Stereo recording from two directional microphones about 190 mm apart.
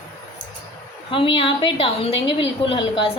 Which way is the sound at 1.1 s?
25° left (ahead or behind).